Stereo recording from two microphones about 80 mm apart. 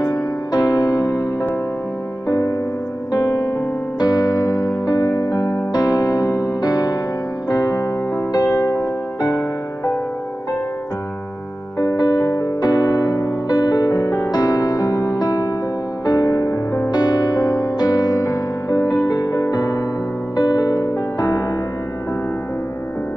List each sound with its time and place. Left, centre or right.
0.0 s music: left
2.2 s music: left
5.7 s music: left
7.4 s piano: left
8.3 s music: left
11.8 s electric piano: left
16.1 s music: left
16.9 s music: left